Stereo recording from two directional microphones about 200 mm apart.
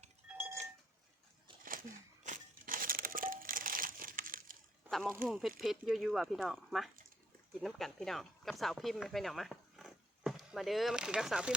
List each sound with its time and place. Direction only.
0.3 s goat: 5° right (ahead or behind)
2.2 s crumpling: 40° right (ahead or behind)
4.9 s speech: centre (ahead or behind)